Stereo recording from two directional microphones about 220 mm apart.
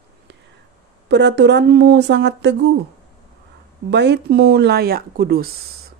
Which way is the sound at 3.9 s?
50° right (ahead or behind).